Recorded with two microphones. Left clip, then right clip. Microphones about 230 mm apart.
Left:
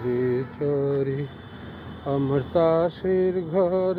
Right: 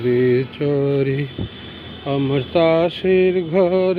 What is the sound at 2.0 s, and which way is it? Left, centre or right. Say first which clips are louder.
Speech: right 4 dB; right.